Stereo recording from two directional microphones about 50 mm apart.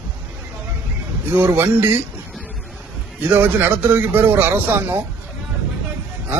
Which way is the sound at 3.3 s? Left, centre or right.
Right.